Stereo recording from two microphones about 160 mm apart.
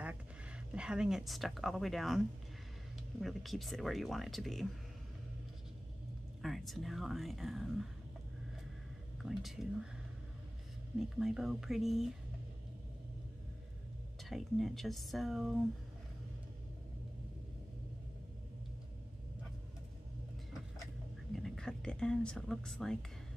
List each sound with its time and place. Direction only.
0.0 s speech: 10° right (ahead or behind)
6.4 s speech: centre (ahead or behind)
9.2 s speech: centre (ahead or behind)
11.0 s speech: 5° right (ahead or behind)
14.3 s speech: centre (ahead or behind)
21.4 s a sound: centre (ahead or behind)